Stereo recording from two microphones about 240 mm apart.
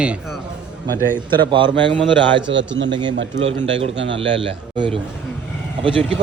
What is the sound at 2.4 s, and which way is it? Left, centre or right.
A man's voice, right.